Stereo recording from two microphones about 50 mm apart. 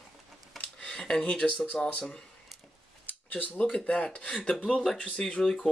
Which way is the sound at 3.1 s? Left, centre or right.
Left.